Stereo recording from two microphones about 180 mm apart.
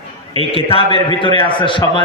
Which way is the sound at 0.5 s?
30° left (ahead or behind).